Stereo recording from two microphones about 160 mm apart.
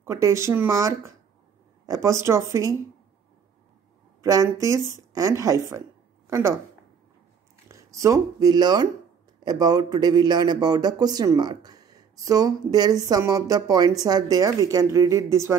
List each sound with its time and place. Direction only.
0.0 s a man's voice: 20° right (ahead or behind)
4.2 s a man's voice: 20° right (ahead or behind)
7.6 s a man's voice: 20° right (ahead or behind)